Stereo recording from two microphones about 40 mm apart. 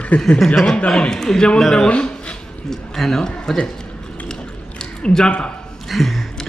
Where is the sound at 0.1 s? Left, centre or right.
Left.